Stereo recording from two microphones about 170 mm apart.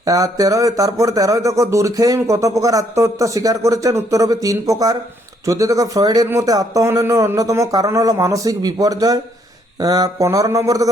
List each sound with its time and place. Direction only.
0.0 s speech: 20° right (ahead or behind)